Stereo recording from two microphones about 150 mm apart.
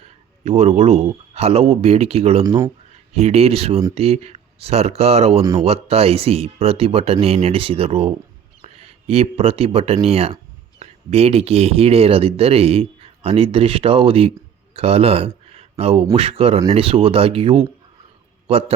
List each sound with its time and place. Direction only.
0.0 s speech: 45° right (ahead or behind)
2.4 s speech: 25° right (ahead or behind)
2.9 s speech: 45° right (ahead or behind)
5.4 s speech: 25° right (ahead or behind)
5.6 s speech: 40° right (ahead or behind)